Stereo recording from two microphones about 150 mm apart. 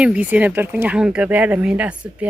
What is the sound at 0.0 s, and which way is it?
Speech, 10° right (ahead or behind).